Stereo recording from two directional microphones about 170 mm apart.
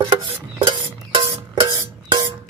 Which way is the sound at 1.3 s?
20° right (ahead or behind).